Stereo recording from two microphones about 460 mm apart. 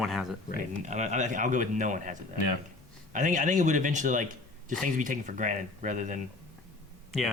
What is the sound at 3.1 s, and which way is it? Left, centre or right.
A man's voice, centre.